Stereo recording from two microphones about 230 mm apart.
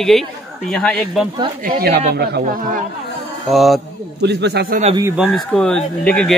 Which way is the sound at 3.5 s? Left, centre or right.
Centre.